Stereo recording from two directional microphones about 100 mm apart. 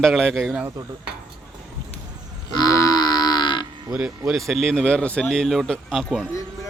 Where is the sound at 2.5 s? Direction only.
35° left (ahead or behind).